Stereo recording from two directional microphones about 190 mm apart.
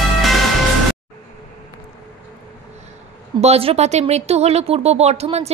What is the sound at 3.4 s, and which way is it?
Speech, 30° right (ahead or behind).